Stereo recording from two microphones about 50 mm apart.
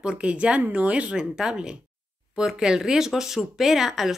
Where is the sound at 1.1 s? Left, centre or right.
Centre.